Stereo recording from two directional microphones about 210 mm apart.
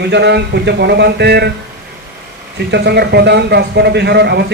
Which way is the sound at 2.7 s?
50° right (ahead or behind).